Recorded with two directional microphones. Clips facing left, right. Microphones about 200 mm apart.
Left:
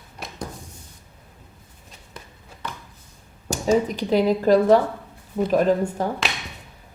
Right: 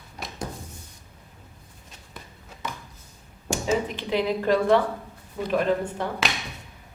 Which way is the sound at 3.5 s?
40° left (ahead or behind).